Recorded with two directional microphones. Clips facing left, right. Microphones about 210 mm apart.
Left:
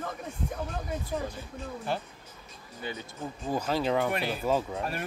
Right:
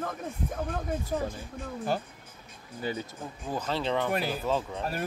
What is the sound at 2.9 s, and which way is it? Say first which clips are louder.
Speech: right 5 dB; 40° right (ahead or behind).